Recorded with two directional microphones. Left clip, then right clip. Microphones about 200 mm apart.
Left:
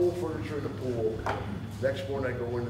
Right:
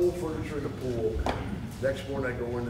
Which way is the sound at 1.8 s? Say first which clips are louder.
Even; 40° left (ahead or behind).